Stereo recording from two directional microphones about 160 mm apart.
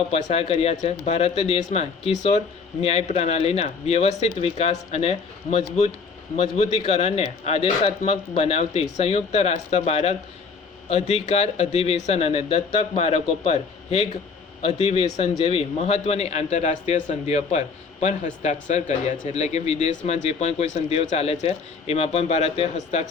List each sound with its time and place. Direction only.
0.1 s a man's voice: 40° left (ahead or behind)